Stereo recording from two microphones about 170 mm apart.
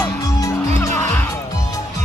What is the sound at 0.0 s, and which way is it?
Music, 15° left (ahead or behind).